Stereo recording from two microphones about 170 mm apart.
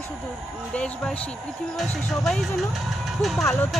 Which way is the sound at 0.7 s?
5° left (ahead or behind).